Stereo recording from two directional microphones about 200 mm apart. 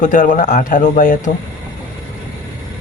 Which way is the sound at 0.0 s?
40° left (ahead or behind).